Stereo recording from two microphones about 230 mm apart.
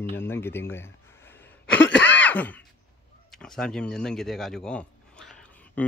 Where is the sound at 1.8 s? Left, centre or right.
Left.